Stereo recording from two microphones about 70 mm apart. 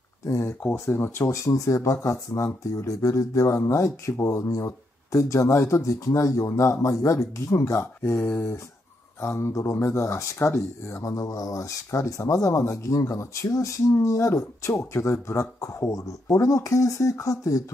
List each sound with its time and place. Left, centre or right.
0.2 s speech: left
8.2 s speech: left
9.2 s speech: left